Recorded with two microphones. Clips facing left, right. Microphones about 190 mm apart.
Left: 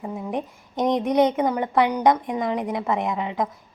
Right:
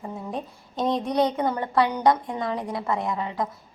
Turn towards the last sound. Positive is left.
turn(degrees=20)  # may be behind; listen again after turning